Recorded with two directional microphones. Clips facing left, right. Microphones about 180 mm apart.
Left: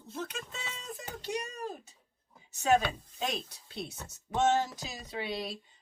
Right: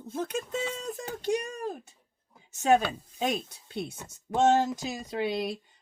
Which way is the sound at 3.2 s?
50° right (ahead or behind).